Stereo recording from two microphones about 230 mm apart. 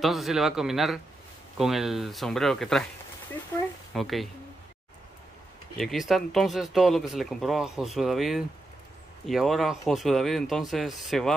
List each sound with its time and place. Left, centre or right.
0.0 s speech: centre
3.9 s speech: centre
5.8 s speech: centre